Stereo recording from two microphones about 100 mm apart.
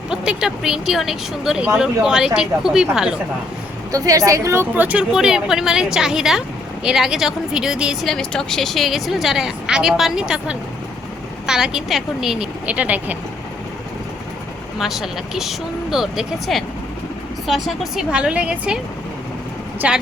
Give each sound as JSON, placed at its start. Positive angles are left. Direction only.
{"t": 0.1, "sound": "a woman's voice", "side_deg": -10}
{"t": 3.9, "sound": "a woman's voice", "side_deg": -35}
{"t": 4.7, "sound": "a woman's voice", "side_deg": -15}
{"t": 8.0, "sound": "a woman's voice", "side_deg": 5}
{"t": 14.8, "sound": "a woman's voice", "side_deg": -5}
{"t": 19.8, "sound": "speech", "side_deg": -10}